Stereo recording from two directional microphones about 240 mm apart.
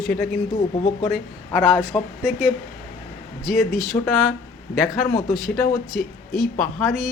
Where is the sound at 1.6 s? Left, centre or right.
Centre.